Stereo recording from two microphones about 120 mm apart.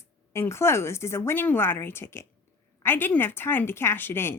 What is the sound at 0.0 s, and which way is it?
Speech, 20° left (ahead or behind).